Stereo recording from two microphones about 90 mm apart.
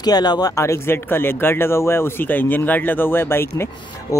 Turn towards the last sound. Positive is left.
turn(degrees=25)  # may be behind; listen again after turning